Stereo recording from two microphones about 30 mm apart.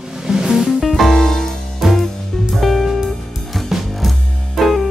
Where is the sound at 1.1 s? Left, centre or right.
Centre.